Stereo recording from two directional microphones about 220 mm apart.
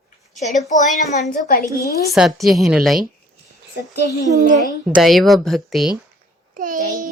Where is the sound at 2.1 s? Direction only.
Centre (ahead or behind).